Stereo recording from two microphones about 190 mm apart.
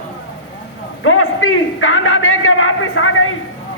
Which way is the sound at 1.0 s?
90° left.